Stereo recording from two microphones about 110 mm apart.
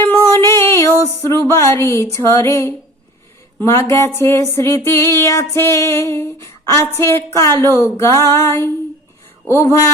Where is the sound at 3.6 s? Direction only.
20° left (ahead or behind).